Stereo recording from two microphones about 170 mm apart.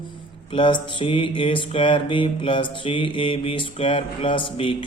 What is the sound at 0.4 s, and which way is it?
Mantra, 30° left (ahead or behind).